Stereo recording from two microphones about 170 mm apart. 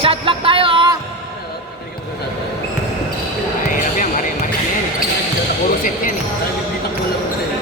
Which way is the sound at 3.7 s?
50° left (ahead or behind).